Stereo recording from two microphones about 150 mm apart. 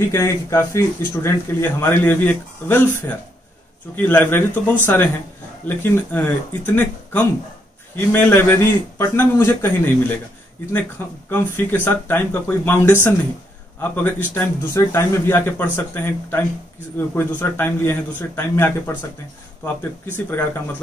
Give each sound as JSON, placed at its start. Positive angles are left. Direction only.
{"t": 0.1, "sound": "speech", "side_deg": 15}
{"t": 20.2, "sound": "speech", "side_deg": 15}